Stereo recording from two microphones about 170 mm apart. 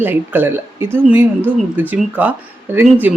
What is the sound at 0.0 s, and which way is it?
A woman's voice, 10° right (ahead or behind).